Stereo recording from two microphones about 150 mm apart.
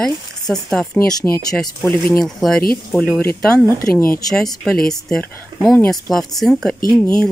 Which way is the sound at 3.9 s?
75° left (ahead or behind).